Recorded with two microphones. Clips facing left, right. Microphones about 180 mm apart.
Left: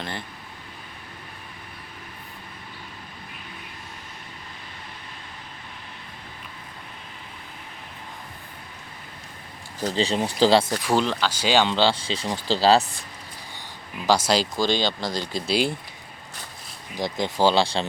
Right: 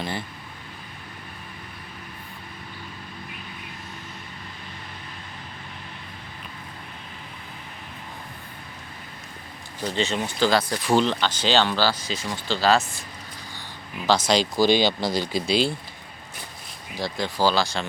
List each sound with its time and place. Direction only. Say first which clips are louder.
9.9 s speech: left 2 dB; 35° left (ahead or behind)
10.7 s speech: right 1 dB; 5° left (ahead or behind); by 13.0 s 35° left (ahead or behind)
14.1 s speech: even; 10° left (ahead or behind)
14.6 s speech: right 4 dB; 10° right (ahead or behind)
17.0 s speech: left 2 dB; 20° left (ahead or behind)